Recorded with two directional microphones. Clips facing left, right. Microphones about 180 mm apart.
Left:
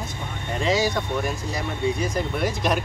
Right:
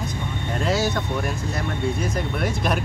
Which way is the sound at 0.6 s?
Centre (ahead or behind).